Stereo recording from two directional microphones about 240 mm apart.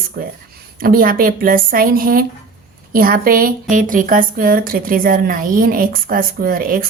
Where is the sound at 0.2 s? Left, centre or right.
Right.